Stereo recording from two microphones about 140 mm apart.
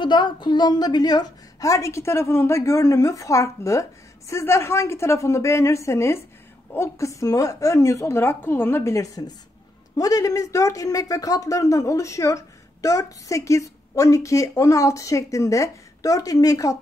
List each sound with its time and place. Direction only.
0.0 s speech: 35° left (ahead or behind)